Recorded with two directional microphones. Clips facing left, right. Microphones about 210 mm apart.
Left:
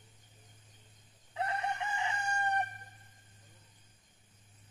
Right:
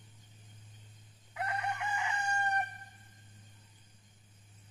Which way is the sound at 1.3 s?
25° left (ahead or behind).